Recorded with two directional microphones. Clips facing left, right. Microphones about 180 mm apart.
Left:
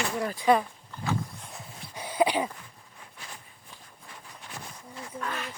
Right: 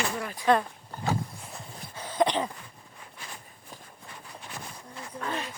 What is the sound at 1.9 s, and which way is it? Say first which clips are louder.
Dog: even; 10° left (ahead or behind).